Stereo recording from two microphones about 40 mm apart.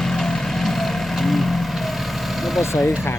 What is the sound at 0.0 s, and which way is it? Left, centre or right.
Vehicle, centre.